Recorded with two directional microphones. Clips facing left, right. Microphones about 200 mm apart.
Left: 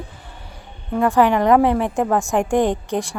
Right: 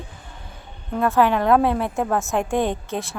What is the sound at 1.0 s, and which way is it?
A woman's voice, 15° left (ahead or behind).